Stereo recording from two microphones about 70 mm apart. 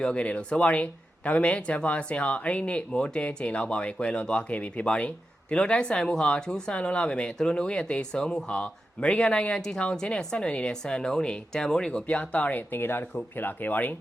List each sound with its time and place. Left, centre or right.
0.0 s speech: centre